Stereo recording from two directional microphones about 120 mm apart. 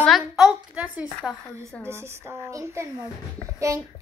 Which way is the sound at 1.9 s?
20° right (ahead or behind).